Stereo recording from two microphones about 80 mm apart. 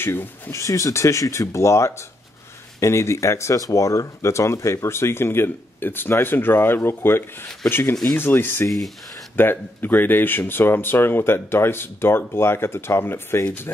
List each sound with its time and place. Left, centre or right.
0.0 s speech: left
0.5 s speech: left
7.9 s speech: centre
8.2 s speech: left
8.6 s speech: centre
9.4 s speech: left